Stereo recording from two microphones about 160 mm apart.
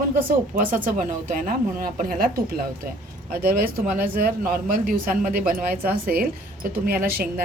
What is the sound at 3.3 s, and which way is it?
Speech, 65° right (ahead or behind).